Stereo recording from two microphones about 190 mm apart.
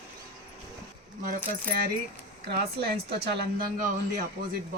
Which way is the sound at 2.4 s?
55° right (ahead or behind).